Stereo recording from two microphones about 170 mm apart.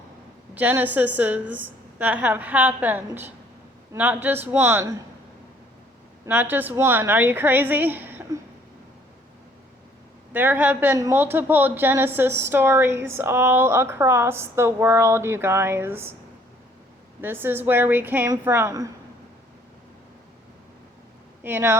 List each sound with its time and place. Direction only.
0.5 s speech: 10° right (ahead or behind)
6.2 s speech: 10° right (ahead or behind)
10.3 s speech: 10° right (ahead or behind)
17.2 s speech: 10° right (ahead or behind)
21.4 s speech: 15° right (ahead or behind)